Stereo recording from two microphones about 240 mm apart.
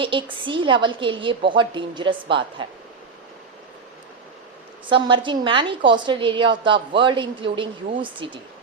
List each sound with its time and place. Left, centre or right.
0.0 s a woman's voice: right
4.9 s a woman's voice: right